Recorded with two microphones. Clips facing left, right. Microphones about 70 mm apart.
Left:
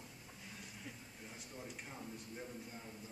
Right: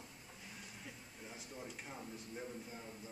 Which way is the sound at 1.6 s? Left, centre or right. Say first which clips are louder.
Even; centre.